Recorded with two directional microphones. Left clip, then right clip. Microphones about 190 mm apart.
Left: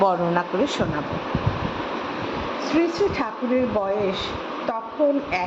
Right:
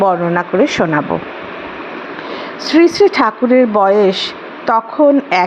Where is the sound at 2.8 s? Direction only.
40° right (ahead or behind).